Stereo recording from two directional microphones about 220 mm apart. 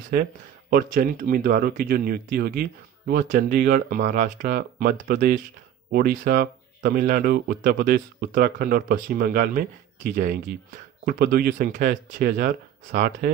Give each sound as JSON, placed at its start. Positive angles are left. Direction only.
{"t": 0.7, "sound": "speech", "side_deg": -40}